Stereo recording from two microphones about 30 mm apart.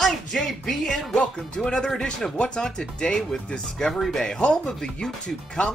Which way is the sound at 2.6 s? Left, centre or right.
Left.